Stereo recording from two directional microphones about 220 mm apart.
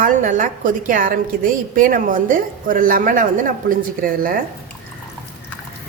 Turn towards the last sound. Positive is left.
turn(degrees=-40)  # may be behind; listen again after turning